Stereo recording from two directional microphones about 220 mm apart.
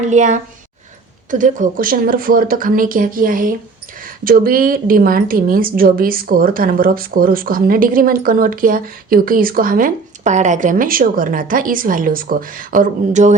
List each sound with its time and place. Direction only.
0.1 s speech: 35° right (ahead or behind)